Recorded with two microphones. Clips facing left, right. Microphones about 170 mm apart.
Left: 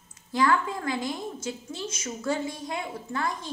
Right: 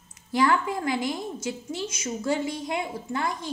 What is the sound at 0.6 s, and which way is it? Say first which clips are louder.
A woman's voice: right 3 dB; 15° right (ahead or behind).